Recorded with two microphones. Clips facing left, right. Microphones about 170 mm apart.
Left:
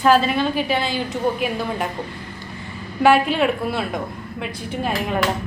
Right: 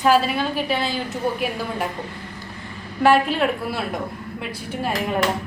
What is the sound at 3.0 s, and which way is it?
Speech, centre (ahead or behind).